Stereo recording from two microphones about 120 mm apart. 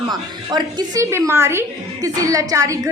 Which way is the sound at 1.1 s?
20° right (ahead or behind).